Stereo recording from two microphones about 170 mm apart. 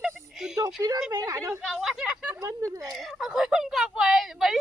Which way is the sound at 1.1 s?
20° right (ahead or behind).